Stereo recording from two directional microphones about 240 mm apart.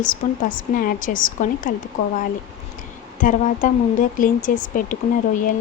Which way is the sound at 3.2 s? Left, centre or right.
Left.